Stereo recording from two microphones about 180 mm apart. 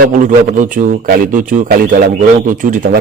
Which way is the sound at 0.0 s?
45° right (ahead or behind).